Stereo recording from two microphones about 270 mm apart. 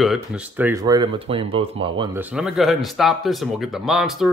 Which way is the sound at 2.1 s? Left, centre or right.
Centre.